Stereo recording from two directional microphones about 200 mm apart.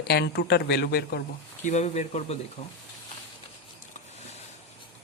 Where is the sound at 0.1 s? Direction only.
55° left (ahead or behind).